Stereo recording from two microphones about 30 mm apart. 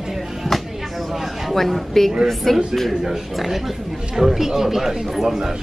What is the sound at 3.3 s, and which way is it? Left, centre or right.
Speech, centre.